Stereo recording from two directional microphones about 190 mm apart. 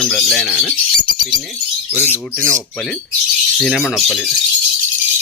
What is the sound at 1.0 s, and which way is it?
Speech, 25° right (ahead or behind).